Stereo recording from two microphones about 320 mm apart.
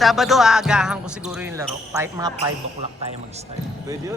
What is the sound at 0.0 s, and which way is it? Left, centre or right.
Speech, centre.